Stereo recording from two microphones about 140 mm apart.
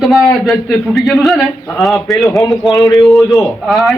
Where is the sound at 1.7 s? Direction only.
Centre (ahead or behind).